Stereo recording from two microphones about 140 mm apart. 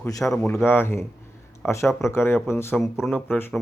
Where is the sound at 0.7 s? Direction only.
15° left (ahead or behind).